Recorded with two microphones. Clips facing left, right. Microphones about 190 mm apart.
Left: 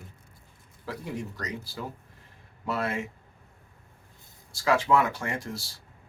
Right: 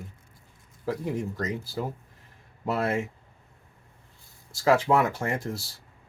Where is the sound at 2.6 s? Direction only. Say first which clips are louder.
Right 4 dB; 40° right (ahead or behind).